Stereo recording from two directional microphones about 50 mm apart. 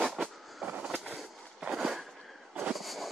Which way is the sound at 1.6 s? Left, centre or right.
Centre.